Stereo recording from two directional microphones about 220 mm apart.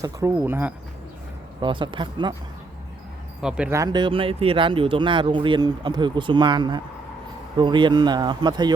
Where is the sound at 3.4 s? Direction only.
5° right (ahead or behind).